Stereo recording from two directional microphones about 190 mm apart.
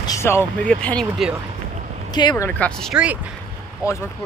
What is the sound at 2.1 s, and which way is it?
Speech, 25° left (ahead or behind).